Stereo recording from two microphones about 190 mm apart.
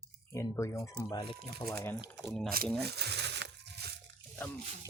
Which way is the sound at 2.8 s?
60° right (ahead or behind).